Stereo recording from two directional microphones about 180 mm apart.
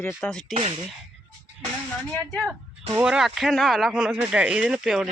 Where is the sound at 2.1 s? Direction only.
5° left (ahead or behind).